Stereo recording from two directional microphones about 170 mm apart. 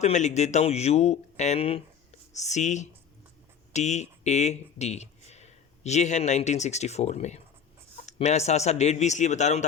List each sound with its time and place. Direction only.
0.0 s speech: 45° left (ahead or behind)